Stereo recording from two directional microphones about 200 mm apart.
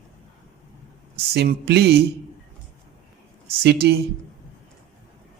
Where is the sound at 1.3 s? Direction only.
55° right (ahead or behind).